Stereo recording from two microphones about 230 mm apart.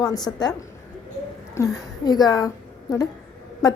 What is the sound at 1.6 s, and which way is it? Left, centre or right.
A woman's voice, centre.